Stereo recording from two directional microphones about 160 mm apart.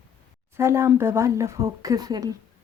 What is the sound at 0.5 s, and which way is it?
Speech, 15° right (ahead or behind).